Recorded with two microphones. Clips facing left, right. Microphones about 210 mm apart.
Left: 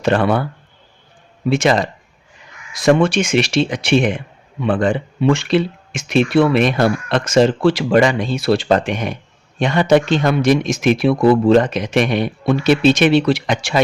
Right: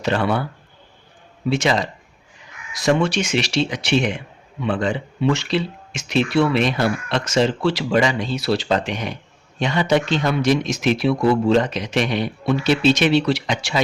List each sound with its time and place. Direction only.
0.0 s speech: 55° left (ahead or behind)
1.5 s speech: 55° left (ahead or behind)